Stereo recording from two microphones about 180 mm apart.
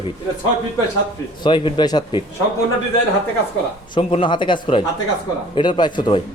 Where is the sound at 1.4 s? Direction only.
25° left (ahead or behind).